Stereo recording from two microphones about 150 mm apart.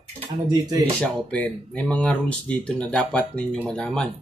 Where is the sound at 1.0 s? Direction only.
5° left (ahead or behind).